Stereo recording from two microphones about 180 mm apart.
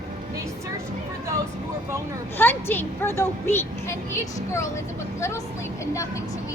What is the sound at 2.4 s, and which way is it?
Speech, 10° left (ahead or behind).